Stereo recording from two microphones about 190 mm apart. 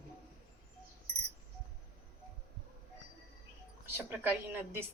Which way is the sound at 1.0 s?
60° right (ahead or behind).